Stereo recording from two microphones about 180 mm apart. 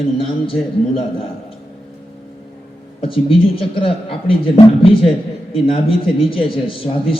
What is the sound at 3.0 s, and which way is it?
A man's voice, 30° left (ahead or behind).